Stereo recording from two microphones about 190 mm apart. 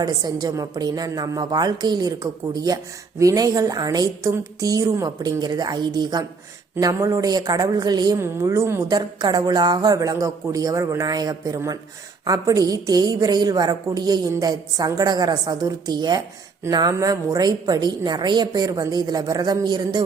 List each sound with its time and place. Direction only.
0.0 s a woman's voice: 20° right (ahead or behind)